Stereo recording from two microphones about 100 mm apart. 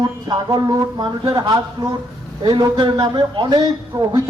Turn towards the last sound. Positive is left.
turn(degrees=-50)  # may be behind; listen again after turning